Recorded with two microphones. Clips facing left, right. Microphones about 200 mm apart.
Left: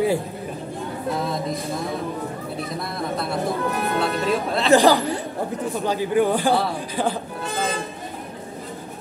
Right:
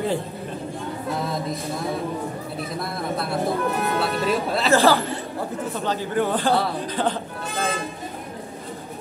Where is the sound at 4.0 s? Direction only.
Centre (ahead or behind).